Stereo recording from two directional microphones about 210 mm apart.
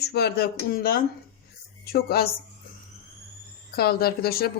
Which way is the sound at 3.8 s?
45° left (ahead or behind).